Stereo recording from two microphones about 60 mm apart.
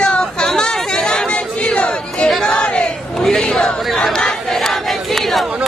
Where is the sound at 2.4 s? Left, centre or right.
Centre.